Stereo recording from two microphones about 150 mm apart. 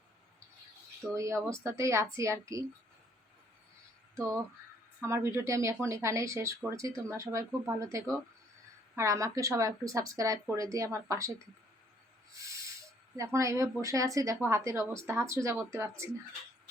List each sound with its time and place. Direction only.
1.1 s a woman's voice: 20° right (ahead or behind)
4.1 s a woman's voice: 20° right (ahead or behind)
13.1 s a woman's voice: 20° right (ahead or behind)